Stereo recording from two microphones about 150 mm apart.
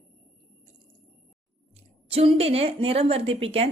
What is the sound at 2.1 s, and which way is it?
Speech, 40° right (ahead or behind).